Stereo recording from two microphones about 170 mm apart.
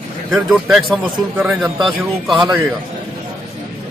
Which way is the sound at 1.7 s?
30° right (ahead or behind).